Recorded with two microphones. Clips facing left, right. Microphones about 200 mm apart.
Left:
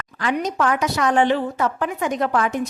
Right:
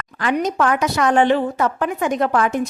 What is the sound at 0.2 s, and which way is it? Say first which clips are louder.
A woman's voice: right 3 dB; 55° right (ahead or behind).